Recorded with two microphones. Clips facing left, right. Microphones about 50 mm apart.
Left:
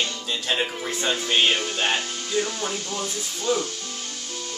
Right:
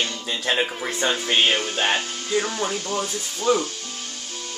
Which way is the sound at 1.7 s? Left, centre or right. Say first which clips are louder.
Right 2 dB; right.